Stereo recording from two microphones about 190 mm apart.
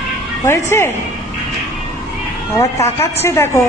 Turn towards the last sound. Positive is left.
turn(degrees=15)  # may be behind; listen again after turning